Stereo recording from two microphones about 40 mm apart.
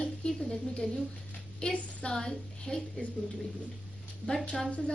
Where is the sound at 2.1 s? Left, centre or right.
Centre.